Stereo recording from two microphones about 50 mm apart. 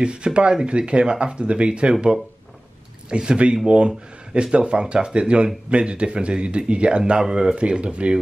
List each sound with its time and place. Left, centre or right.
0.0 s speech: centre